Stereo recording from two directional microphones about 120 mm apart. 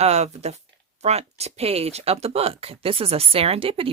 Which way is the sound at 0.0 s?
60° right (ahead or behind).